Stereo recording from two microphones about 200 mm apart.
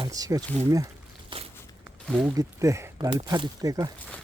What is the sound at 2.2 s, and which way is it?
Speech, 15° right (ahead or behind).